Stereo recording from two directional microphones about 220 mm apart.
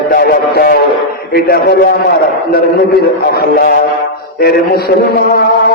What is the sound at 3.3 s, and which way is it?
Speech, 45° left (ahead or behind).